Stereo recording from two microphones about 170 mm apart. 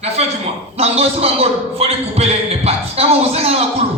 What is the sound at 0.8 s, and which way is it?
A man's voice, 35° right (ahead or behind).